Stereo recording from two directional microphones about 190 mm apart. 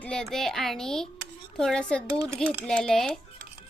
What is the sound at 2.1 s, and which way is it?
Speech, 15° right (ahead or behind).